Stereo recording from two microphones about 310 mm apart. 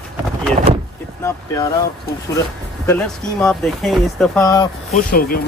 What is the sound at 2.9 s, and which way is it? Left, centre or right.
Speech, centre.